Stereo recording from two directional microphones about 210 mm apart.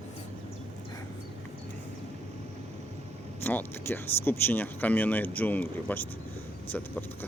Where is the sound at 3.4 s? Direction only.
10° left (ahead or behind).